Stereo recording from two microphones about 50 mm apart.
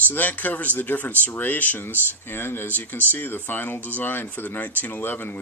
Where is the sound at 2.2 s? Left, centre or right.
Left.